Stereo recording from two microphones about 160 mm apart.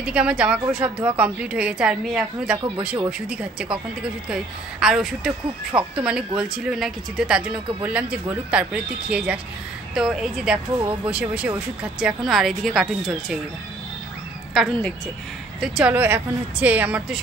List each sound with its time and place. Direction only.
0.0 s speech: 5° right (ahead or behind)
5.7 s speech: 30° right (ahead or behind)
6.0 s speech: 5° right (ahead or behind)
14.5 s speech: centre (ahead or behind)